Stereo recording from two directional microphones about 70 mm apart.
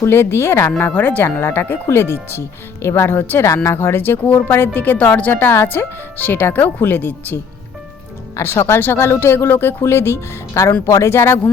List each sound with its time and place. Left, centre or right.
0.0 s speech: left
3.4 s speech: left
8.5 s speech: left